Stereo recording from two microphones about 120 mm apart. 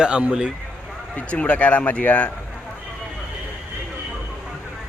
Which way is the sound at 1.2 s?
10° left (ahead or behind).